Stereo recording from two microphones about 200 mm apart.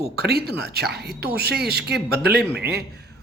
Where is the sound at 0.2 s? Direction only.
50° right (ahead or behind).